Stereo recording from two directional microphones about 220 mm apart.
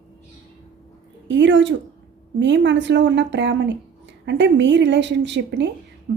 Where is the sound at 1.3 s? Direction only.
55° right (ahead or behind).